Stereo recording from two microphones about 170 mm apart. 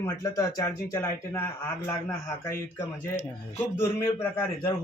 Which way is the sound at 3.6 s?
15° left (ahead or behind).